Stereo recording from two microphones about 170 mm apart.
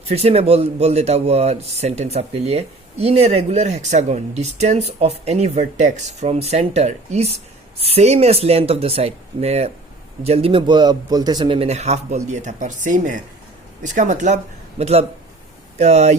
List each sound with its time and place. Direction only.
0.0 s speech: 35° right (ahead or behind)